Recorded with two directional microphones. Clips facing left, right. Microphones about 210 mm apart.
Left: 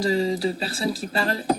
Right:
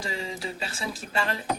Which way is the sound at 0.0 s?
35° left (ahead or behind).